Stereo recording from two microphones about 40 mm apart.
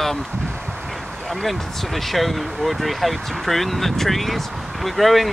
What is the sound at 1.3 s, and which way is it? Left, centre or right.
Speech, centre.